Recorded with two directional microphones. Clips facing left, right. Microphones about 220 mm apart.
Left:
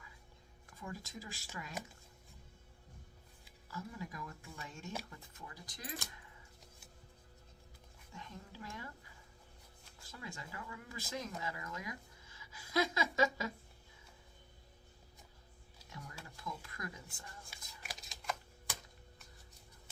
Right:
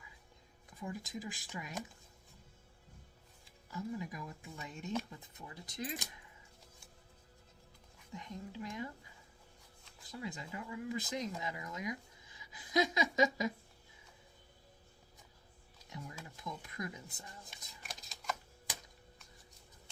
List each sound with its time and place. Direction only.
0.8 s speech: 15° right (ahead or behind)
3.7 s speech: 20° right (ahead or behind)
8.1 s speech: 15° right (ahead or behind)
10.0 s speech: 20° right (ahead or behind)
15.9 s speech: 20° right (ahead or behind)
17.8 s shuffling cards: centre (ahead or behind)